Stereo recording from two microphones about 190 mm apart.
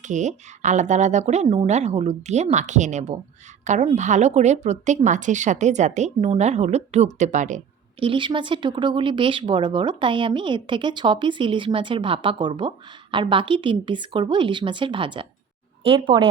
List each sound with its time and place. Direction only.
0.0 s a woman's voice: 40° right (ahead or behind)
8.0 s speech: 25° right (ahead or behind)